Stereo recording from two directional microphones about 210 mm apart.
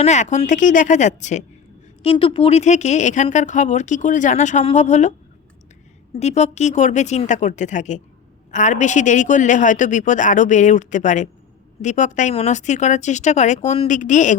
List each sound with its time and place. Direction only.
0.0 s speech: 35° left (ahead or behind)
6.1 s speech: 30° left (ahead or behind)